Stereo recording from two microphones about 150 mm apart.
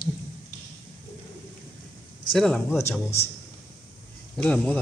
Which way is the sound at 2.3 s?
5° left (ahead or behind).